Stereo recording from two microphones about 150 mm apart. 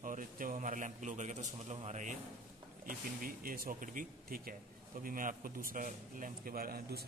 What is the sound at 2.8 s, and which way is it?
A man's voice, 70° right (ahead or behind).